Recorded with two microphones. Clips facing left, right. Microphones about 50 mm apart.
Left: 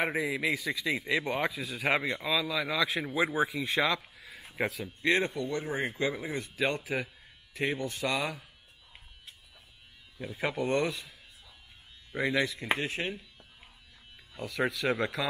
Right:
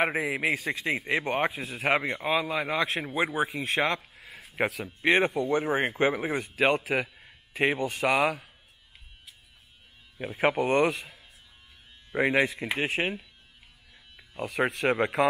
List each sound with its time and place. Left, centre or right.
0.2 s speech: right
0.5 s a man's voice: right
4.6 s speech: right
5.3 s speech: right
7.2 s speech: right
10.1 s speech: right
12.7 s speech: right
14.3 s speech: right